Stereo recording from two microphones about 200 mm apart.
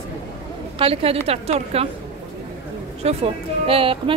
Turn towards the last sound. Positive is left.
turn(degrees=-25)  # may be behind; listen again after turning